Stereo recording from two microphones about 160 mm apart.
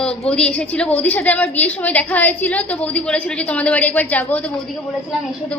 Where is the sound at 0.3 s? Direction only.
5° left (ahead or behind).